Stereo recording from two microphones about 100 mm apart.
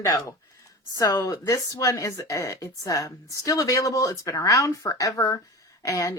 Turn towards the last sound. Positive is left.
turn(degrees=35)  # may be behind; listen again after turning